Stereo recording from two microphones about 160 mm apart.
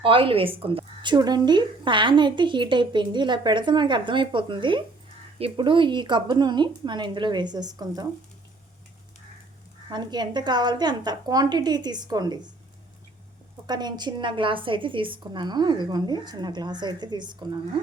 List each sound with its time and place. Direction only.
0.0 s speech: 35° right (ahead or behind)
9.9 s speech: 25° right (ahead or behind)
13.7 s speech: 25° right (ahead or behind)